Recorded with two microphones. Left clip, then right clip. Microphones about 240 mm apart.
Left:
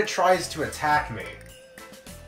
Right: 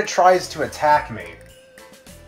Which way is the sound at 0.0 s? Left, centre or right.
Centre.